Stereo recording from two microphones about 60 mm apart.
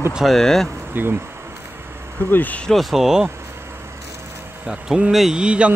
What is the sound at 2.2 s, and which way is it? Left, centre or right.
Speech, left.